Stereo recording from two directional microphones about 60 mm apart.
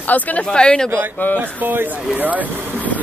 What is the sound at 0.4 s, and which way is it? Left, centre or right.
Speech, centre.